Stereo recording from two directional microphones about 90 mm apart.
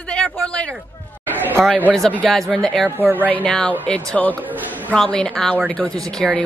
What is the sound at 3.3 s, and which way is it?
Speech, 15° left (ahead or behind).